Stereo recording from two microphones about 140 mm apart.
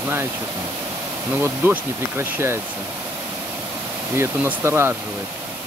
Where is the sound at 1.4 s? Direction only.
15° right (ahead or behind).